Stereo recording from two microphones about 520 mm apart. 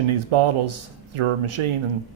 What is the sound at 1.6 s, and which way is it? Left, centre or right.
Speech, right.